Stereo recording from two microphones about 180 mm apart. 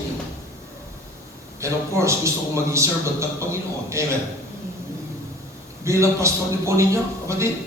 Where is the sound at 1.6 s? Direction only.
15° right (ahead or behind).